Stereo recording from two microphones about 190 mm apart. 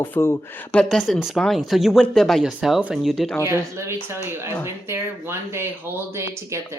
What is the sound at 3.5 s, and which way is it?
Speech, 15° right (ahead or behind).